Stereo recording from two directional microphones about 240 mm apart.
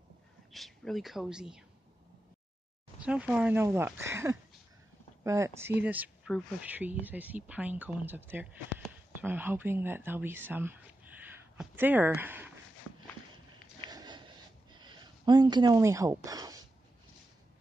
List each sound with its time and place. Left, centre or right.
0.5 s speech: centre
3.0 s speech: centre
13.8 s a sound: centre
14.8 s speech: centre